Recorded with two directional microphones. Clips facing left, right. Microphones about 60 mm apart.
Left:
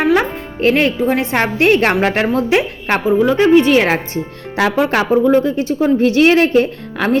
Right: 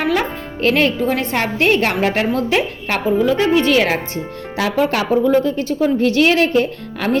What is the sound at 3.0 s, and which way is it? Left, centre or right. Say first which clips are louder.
Speech: left 3 dB; centre.